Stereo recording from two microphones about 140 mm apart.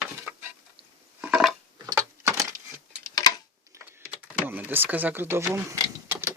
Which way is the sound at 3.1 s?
25° left (ahead or behind).